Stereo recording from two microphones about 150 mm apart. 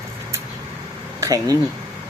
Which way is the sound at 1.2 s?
20° right (ahead or behind).